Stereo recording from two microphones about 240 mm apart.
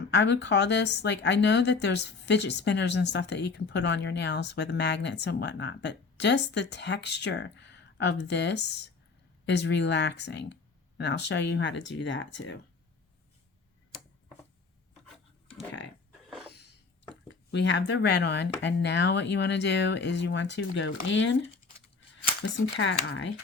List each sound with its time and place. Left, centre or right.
0.1 s a woman's voice: left
16.5 s a sound: left
17.2 s a woman's voice: left